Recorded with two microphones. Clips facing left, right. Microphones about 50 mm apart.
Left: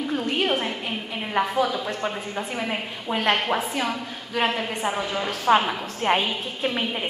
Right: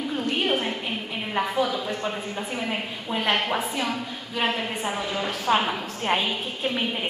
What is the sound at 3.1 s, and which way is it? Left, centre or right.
Speech, left.